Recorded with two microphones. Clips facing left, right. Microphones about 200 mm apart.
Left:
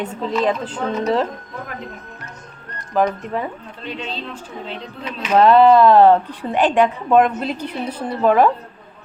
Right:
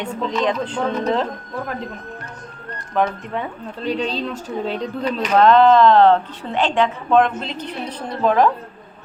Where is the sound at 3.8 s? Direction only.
35° right (ahead or behind).